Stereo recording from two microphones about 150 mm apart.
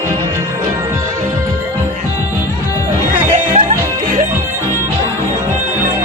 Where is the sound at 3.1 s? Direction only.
55° right (ahead or behind).